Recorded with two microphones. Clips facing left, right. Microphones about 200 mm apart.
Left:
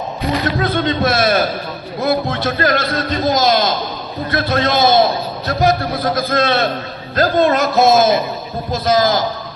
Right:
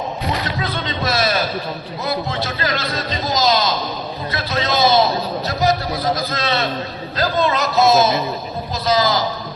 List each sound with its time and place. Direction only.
0.5 s a man's voice: 55° left (ahead or behind)